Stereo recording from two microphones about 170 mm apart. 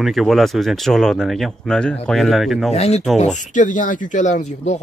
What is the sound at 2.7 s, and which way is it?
Speech, 40° left (ahead or behind).